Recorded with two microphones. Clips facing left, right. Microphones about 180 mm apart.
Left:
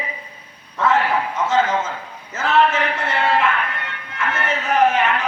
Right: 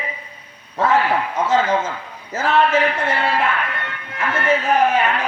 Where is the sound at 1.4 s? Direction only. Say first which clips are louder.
Right 2 dB; 35° right (ahead or behind).